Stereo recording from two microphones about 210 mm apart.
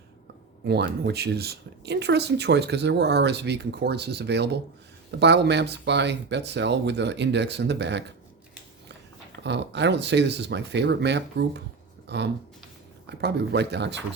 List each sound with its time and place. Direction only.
0.6 s speech: 50° right (ahead or behind)
9.4 s speech: 55° right (ahead or behind)